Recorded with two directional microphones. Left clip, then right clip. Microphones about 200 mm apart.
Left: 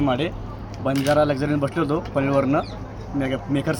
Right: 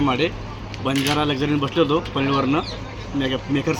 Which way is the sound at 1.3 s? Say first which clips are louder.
Right 1 dB; 25° left (ahead or behind).